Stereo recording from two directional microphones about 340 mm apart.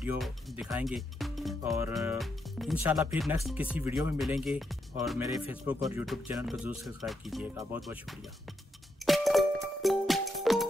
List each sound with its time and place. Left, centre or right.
0.0 s speech: centre
9.0 s music: centre